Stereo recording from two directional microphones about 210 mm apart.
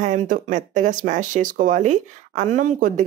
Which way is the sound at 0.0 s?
35° right (ahead or behind).